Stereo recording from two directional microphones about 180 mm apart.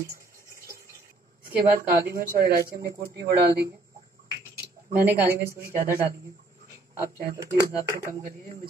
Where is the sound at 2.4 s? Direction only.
60° right (ahead or behind).